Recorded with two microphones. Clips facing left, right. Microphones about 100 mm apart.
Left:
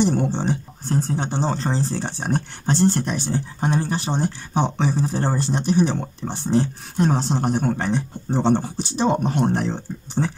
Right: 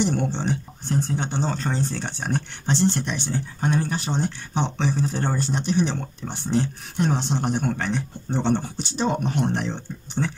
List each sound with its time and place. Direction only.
0.0 s speech: 35° left (ahead or behind)